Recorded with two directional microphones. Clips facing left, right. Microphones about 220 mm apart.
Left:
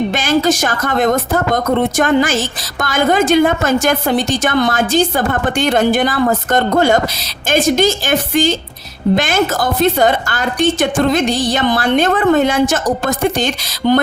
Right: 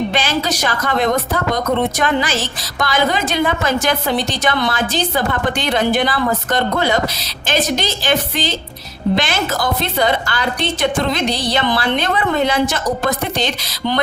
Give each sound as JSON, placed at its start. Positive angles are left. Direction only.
{"t": 0.1, "sound": "speech", "side_deg": 50}